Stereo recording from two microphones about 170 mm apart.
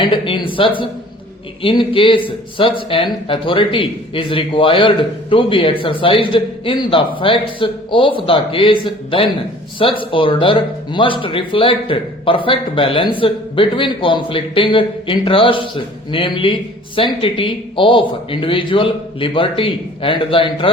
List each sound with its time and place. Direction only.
0.0 s a man's voice: 30° left (ahead or behind)